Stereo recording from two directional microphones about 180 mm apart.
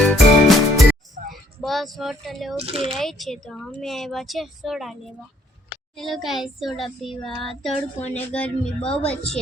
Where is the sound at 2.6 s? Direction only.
30° right (ahead or behind).